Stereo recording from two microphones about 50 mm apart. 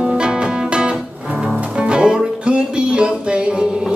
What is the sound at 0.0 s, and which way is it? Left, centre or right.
Music, centre.